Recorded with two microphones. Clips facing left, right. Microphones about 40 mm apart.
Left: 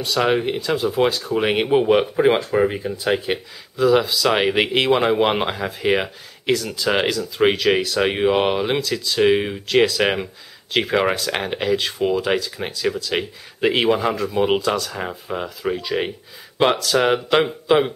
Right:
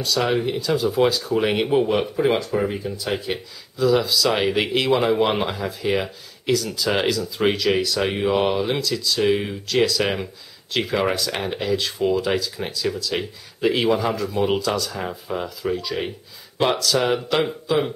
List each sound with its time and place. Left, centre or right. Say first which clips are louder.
0.2 s speech: left 4 dB; left
5.5 s speech: left 3 dB; left